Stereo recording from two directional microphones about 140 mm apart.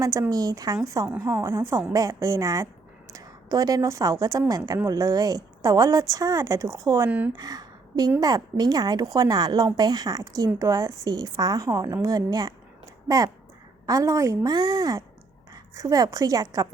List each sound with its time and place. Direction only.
0.0 s a woman's voice: 25° right (ahead or behind)
7.3 s a sound: 25° right (ahead or behind)
8.2 s a woman's voice: 25° right (ahead or behind)